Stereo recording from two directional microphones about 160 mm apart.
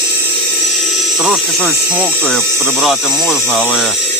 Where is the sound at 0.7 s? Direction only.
Centre (ahead or behind).